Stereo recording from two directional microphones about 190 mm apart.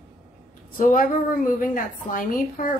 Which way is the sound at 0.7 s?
45° left (ahead or behind).